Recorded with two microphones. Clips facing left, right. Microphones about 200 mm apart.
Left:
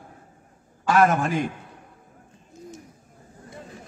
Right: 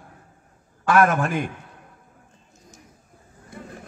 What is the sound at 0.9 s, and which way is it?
Speech, 60° right (ahead or behind).